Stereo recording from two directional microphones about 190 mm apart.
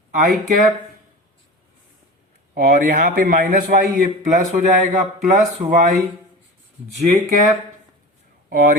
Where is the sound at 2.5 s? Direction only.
45° right (ahead or behind).